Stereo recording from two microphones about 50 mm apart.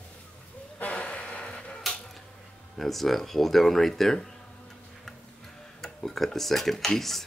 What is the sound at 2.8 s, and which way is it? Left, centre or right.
Speech, centre.